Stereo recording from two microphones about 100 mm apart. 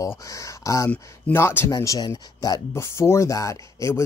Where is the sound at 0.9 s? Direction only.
20° left (ahead or behind); by 2.6 s 40° left (ahead or behind).